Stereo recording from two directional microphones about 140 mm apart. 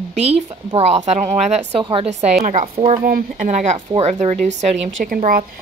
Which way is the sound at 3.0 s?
75° right (ahead or behind).